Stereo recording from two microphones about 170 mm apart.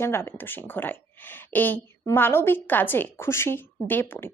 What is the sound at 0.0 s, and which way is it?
A woman's voice, 15° left (ahead or behind).